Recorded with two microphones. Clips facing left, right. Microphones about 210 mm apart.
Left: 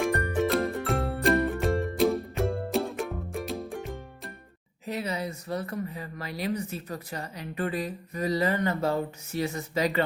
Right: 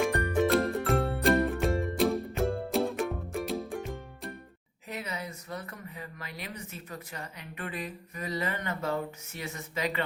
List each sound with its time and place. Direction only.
0.0 s music: centre (ahead or behind)
4.9 s speech: 35° left (ahead or behind)